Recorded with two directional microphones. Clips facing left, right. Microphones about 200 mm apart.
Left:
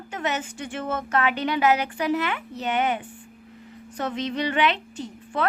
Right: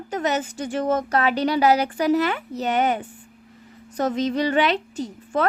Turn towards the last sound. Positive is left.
turn(degrees=-40)  # may be behind; listen again after turning